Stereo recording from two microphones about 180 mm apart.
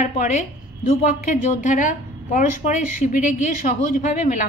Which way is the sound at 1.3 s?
45° left (ahead or behind).